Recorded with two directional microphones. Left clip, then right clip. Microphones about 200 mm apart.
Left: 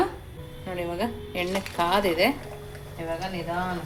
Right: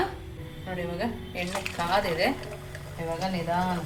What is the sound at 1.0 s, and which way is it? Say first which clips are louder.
Speech: left 3 dB; 40° left (ahead or behind).